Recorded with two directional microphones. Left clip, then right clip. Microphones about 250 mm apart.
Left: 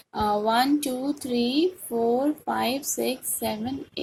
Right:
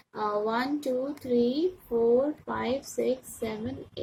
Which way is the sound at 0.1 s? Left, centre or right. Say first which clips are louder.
Left 5 dB; centre.